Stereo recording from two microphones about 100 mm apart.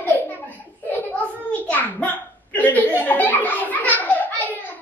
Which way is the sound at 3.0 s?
15° left (ahead or behind).